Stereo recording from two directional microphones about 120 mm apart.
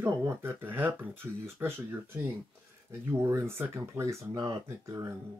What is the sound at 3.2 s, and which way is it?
Speech, 25° right (ahead or behind).